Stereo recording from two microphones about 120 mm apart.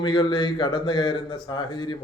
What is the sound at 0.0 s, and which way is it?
A man's voice, 40° left (ahead or behind).